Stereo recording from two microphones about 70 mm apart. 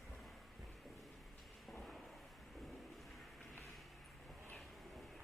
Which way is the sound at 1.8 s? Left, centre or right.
Centre.